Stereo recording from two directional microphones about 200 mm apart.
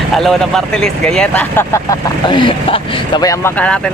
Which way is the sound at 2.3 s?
25° left (ahead or behind).